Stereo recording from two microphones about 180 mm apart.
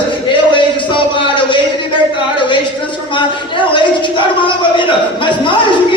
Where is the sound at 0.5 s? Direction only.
25° left (ahead or behind).